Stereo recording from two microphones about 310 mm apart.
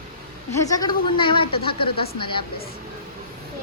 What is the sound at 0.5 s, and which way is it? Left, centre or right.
Speech, centre.